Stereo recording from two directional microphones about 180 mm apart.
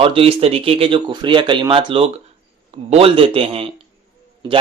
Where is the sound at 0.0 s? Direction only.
30° right (ahead or behind).